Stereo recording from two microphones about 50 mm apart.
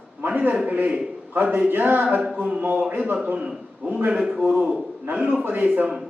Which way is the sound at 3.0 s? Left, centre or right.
Right.